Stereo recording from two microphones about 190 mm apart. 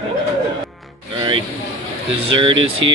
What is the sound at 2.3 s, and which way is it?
Speech, 25° right (ahead or behind).